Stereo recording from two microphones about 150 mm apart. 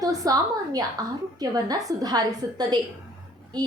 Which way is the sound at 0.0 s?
25° right (ahead or behind).